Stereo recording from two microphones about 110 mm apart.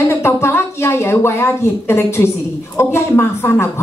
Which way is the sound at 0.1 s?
25° left (ahead or behind).